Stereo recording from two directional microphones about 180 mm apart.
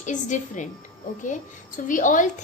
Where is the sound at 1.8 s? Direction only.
45° left (ahead or behind).